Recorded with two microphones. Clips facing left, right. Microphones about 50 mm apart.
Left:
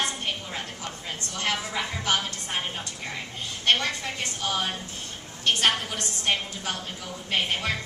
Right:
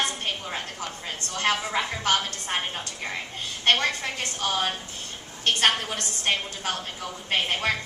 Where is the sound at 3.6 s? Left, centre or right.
Right.